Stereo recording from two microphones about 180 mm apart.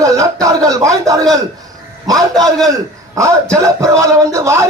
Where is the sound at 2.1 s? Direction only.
Centre (ahead or behind).